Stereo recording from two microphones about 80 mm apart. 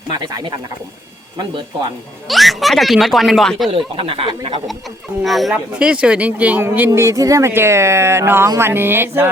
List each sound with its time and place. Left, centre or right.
0.2 s speech: right
2.2 s speech: centre
3.7 s speech: right
5.2 s speech: centre; by 7.0 s right
7.0 s speech: right